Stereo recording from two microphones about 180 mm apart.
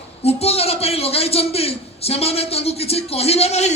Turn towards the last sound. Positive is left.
turn(degrees=35)  # may be behind; listen again after turning